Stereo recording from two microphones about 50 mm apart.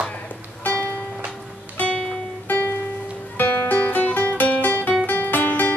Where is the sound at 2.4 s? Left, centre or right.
Left.